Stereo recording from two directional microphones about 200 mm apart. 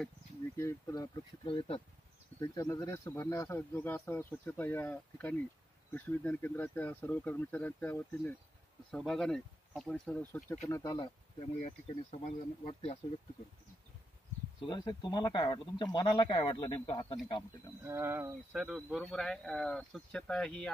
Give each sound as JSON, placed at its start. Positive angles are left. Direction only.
{"t": 0.6, "sound": "speech", "side_deg": 15}
{"t": 11.6, "sound": "speech", "side_deg": 35}
{"t": 14.6, "sound": "speech", "side_deg": 20}
{"t": 17.8, "sound": "speech", "side_deg": -10}